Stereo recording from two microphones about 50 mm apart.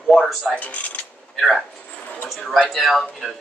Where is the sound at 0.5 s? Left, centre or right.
Left.